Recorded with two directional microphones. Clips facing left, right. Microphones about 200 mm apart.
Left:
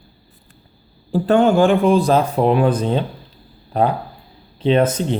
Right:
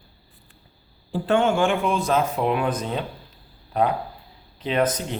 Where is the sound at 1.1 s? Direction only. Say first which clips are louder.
Left 6 dB; 40° left (ahead or behind).